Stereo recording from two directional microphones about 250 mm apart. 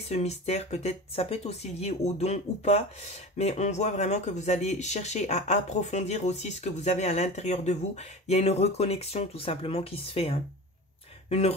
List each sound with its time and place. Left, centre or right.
0.1 s speech: left